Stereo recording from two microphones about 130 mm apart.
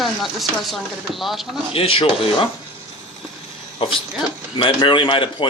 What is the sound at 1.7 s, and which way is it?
Speech, 45° left (ahead or behind).